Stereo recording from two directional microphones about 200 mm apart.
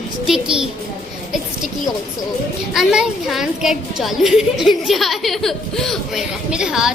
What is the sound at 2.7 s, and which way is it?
Speech, 5° right (ahead or behind).